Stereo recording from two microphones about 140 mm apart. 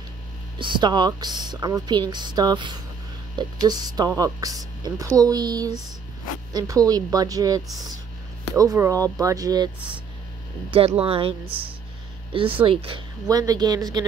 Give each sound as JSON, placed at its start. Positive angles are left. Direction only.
{"t": 0.6, "sound": "speech", "side_deg": -35}
{"t": 11.0, "sound": "speech", "side_deg": -40}
{"t": 13.3, "sound": "speech", "side_deg": -25}